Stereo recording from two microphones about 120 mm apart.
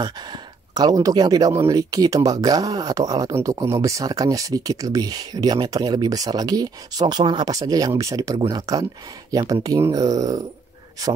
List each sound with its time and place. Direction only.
0.0 s speech: 35° right (ahead or behind)